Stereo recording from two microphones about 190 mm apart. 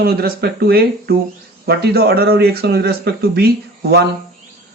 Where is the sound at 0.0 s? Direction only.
55° right (ahead or behind).